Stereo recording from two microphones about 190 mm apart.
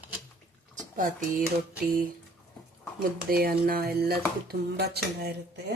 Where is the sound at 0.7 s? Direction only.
45° right (ahead or behind).